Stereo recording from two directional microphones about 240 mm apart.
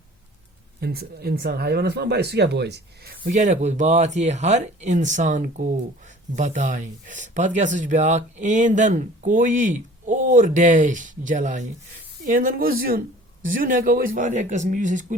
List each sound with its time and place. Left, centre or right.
0.8 s speech: right